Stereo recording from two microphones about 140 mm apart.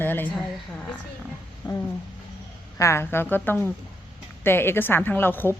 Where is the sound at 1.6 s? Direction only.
30° left (ahead or behind).